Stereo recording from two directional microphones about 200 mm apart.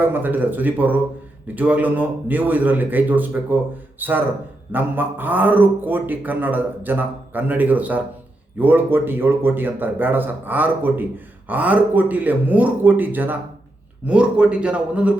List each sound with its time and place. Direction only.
0.0 s speech: 10° right (ahead or behind)